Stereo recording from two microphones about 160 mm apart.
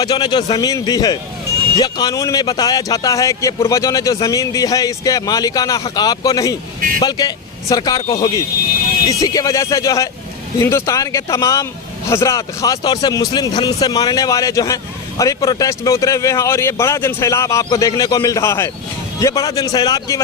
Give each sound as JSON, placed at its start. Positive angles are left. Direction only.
{"t": 0.0, "sound": "speech", "side_deg": 25}